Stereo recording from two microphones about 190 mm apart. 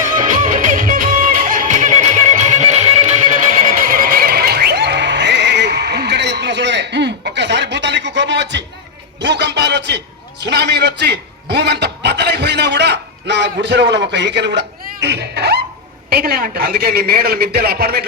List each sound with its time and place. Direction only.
0.2 s music: 45° right (ahead or behind)
3.8 s neigh: 50° right (ahead or behind); by 8.6 s 65° right (ahead or behind)
9.2 s a sound: 65° right (ahead or behind)
15.0 s music: 60° right (ahead or behind)
16.0 s a man's voice: 50° right (ahead or behind)